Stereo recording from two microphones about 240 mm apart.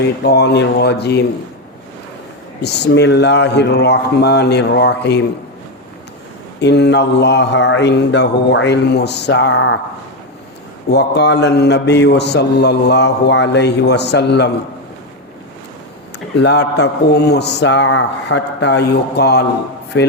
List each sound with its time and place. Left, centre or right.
0.3 s a man's voice: left
2.6 s a man's voice: left
6.6 s a man's voice: left
10.8 s a man's voice: left
16.4 s a man's voice: left